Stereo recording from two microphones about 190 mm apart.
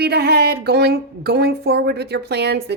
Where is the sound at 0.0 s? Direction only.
60° right (ahead or behind).